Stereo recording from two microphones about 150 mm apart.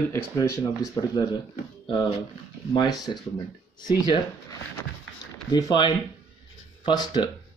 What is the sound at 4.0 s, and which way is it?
Speech, 25° left (ahead or behind).